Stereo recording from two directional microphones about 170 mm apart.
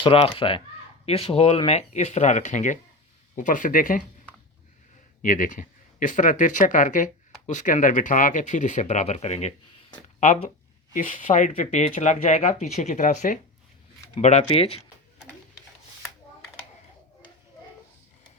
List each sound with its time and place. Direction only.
0.0 s speech: 30° left (ahead or behind); by 4.0 s 55° left (ahead or behind)
5.2 s speech: 50° left (ahead or behind)
10.9 s speech: 50° left (ahead or behind)